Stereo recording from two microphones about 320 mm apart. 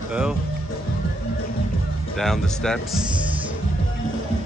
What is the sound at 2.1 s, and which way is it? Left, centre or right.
Speech, centre.